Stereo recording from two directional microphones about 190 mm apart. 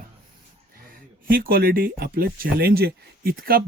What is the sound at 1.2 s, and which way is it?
Speech, 50° right (ahead or behind).